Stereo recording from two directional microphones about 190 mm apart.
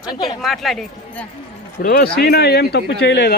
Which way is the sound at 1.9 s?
55° left (ahead or behind).